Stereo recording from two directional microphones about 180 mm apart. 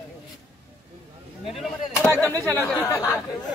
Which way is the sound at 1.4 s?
Centre (ahead or behind).